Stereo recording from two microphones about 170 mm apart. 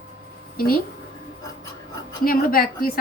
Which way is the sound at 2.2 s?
55° left (ahead or behind).